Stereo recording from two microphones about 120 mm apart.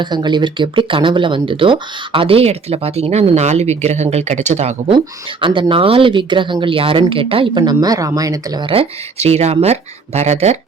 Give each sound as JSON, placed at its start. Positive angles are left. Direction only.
{"t": 0.0, "sound": "speech", "side_deg": -40}
{"t": 5.4, "sound": "speech", "side_deg": -45}
{"t": 8.6, "sound": "speech", "side_deg": -50}